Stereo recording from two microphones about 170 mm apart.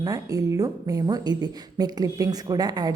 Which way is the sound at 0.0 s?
20° right (ahead or behind).